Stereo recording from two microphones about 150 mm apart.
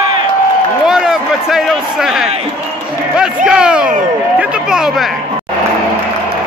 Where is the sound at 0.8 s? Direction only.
5° right (ahead or behind).